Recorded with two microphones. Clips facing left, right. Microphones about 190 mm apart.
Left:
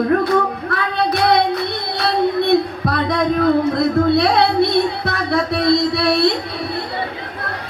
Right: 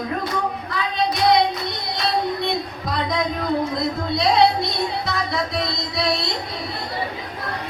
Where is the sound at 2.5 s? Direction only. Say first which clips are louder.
Left 9 dB; 60° left (ahead or behind).